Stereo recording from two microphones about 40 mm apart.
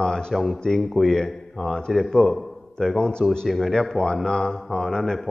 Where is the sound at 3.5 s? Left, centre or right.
Centre.